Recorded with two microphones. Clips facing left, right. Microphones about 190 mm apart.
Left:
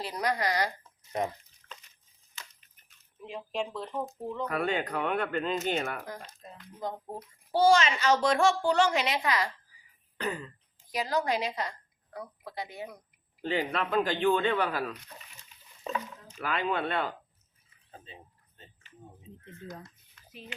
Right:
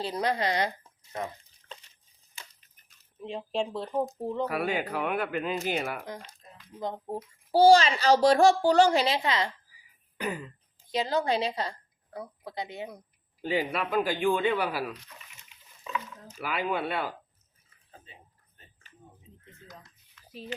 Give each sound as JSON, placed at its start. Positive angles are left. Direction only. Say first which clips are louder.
{"t": 0.0, "sound": "speech", "louder": "right 2 dB", "side_deg": -25}
{"t": 1.1, "sound": "speech", "louder": "left 4 dB", "side_deg": 20}
{"t": 1.6, "sound": "a sound", "louder": "right 3 dB", "side_deg": -30}
{"t": 3.2, "sound": "a woman's voice", "louder": "right 3 dB", "side_deg": -30}
{"t": 4.4, "sound": "speech", "louder": "left 3 dB", "side_deg": -5}
{"t": 6.4, "sound": "a sound", "louder": "left 5 dB", "side_deg": 80}
{"t": 6.7, "sound": "a woman's voice", "louder": "right 3 dB", "side_deg": -25}
{"t": 10.2, "sound": "speech", "louder": "right 1 dB", "side_deg": -10}
{"t": 10.9, "sound": "a woman's voice", "louder": "right 2 dB", "side_deg": -25}
{"t": 13.4, "sound": "speech", "louder": "right 1 dB", "side_deg": -10}
{"t": 16.4, "sound": "speech", "louder": "even", "side_deg": -5}
{"t": 18.0, "sound": "a sound", "louder": "left 5 dB", "side_deg": 25}